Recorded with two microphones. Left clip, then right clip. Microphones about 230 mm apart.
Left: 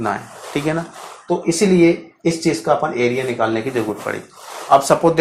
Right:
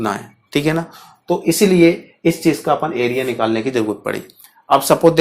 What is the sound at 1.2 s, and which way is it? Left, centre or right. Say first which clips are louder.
Speech: right 2 dB; right.